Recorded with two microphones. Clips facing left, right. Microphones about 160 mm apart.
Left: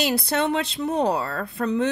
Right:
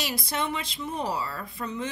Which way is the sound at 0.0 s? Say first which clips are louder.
Left 8 dB; 70° left (ahead or behind).